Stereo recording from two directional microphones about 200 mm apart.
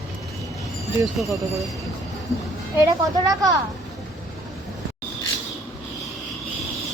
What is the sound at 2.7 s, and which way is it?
Speech, 20° right (ahead or behind).